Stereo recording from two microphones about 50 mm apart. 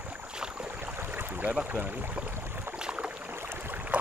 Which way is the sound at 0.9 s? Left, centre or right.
Right.